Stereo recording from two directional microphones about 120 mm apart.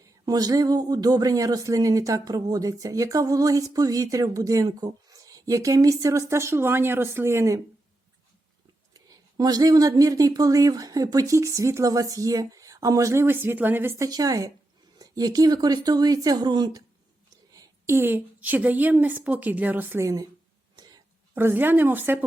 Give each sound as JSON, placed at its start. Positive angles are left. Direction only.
{"t": 0.0, "sound": "speech", "side_deg": -30}
{"t": 8.9, "sound": "speech", "side_deg": -30}
{"t": 14.0, "sound": "a woman's voice", "side_deg": -30}
{"t": 20.7, "sound": "whispering", "side_deg": -35}
{"t": 21.3, "sound": "a woman's voice", "side_deg": -20}